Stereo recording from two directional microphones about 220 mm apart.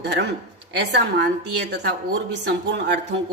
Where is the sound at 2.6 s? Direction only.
50° right (ahead or behind).